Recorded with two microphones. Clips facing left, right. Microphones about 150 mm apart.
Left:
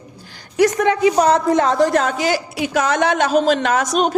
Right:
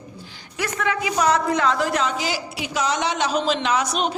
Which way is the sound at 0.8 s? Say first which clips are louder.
Left 9 dB; 30° left (ahead or behind).